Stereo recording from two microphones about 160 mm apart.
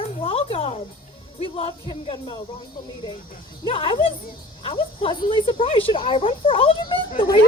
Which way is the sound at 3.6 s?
35° left (ahead or behind).